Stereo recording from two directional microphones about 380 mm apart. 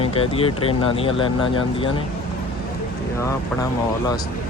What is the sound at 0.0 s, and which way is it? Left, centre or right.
Speech, centre.